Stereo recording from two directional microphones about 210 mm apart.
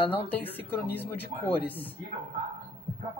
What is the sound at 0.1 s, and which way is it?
A man's voice, 10° left (ahead or behind).